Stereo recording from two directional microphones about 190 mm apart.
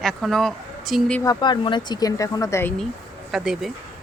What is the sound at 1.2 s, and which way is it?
A woman's voice, 20° left (ahead or behind).